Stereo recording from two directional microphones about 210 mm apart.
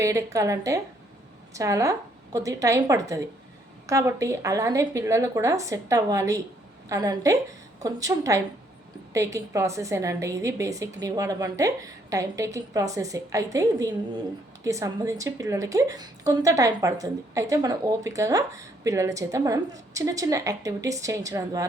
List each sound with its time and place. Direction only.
0.0 s a woman's voice: 15° right (ahead or behind)